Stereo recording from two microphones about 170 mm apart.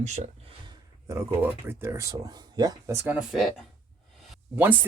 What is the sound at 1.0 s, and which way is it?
Speech, 15° right (ahead or behind).